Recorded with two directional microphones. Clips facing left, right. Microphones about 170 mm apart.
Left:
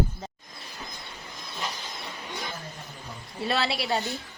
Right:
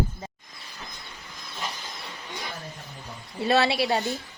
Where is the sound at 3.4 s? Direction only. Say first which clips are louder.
Right 5 dB; 20° right (ahead or behind).